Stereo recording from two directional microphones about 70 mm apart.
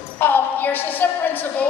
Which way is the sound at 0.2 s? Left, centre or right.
Left.